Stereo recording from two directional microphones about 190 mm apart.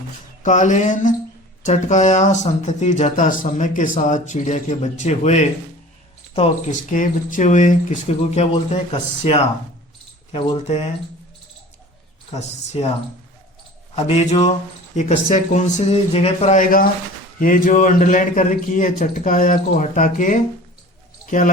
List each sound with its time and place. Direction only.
0.4 s speech: 40° left (ahead or behind)
12.4 s speech: 35° left (ahead or behind)
13.9 s a man's voice: 35° left (ahead or behind)